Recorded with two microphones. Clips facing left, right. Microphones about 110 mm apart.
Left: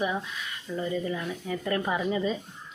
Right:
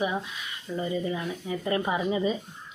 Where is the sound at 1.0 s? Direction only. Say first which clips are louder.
Right 1 dB; 15° right (ahead or behind).